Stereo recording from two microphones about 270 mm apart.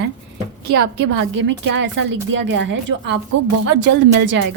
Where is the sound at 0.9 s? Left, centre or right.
Right.